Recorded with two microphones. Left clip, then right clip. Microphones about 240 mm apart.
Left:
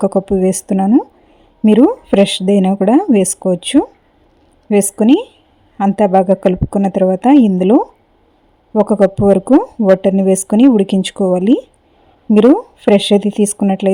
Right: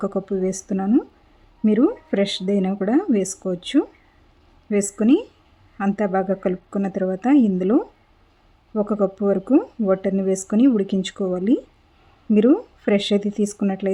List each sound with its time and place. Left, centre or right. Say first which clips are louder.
0.3 s speech: left 9 dB; left